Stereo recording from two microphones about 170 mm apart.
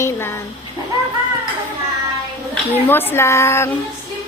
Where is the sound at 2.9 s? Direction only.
10° left (ahead or behind).